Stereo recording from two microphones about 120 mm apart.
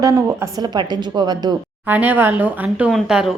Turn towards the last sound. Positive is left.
turn(degrees=-5)  # may be behind; listen again after turning